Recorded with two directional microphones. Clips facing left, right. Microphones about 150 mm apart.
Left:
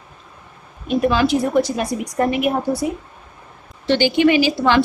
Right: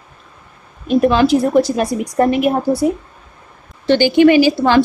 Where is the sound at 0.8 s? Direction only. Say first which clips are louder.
Right 5 dB; 35° right (ahead or behind).